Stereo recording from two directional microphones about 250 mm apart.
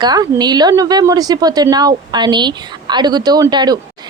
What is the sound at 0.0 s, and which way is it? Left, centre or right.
Speech, centre.